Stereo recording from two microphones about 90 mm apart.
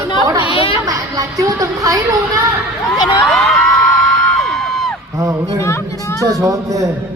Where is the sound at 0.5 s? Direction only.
90° left.